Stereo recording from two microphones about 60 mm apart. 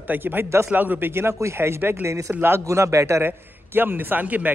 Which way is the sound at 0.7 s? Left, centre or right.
Right.